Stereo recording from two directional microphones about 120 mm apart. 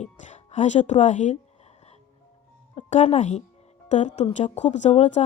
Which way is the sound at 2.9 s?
70° left (ahead or behind).